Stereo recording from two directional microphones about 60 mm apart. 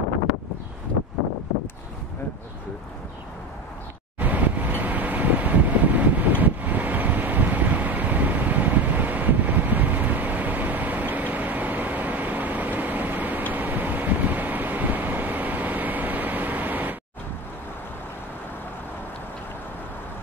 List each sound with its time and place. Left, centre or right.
4.2 s vehicle: right